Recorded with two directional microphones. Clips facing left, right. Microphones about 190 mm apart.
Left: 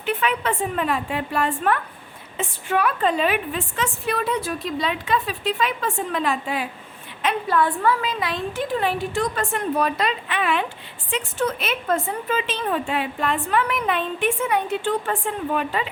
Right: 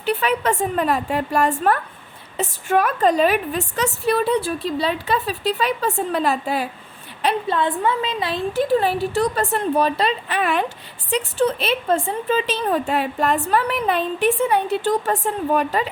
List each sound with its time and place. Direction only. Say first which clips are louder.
0.0 s a woman's voice: right 3 dB; 35° right (ahead or behind)
7.4 s a woman's voice: even; 25° right (ahead or behind); by 15.9 s 40° right (ahead or behind)